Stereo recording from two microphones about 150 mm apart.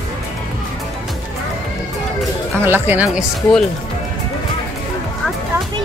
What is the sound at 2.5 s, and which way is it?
Speech, 15° right (ahead or behind).